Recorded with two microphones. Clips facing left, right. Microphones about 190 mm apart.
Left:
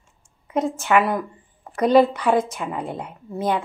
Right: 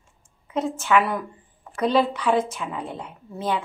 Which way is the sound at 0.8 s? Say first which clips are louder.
Left 1 dB; 50° left (ahead or behind).